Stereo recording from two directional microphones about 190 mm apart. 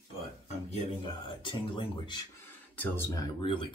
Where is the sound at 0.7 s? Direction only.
25° left (ahead or behind).